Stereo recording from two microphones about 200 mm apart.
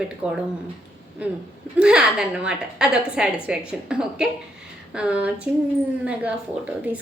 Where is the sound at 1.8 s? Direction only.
5° right (ahead or behind).